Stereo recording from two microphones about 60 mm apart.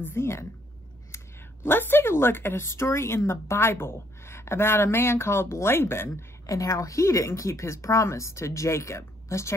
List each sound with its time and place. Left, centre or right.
0.0 s speech: left
6.4 s speech: left